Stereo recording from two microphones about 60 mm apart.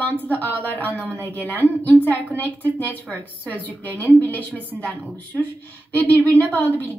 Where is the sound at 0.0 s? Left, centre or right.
Left.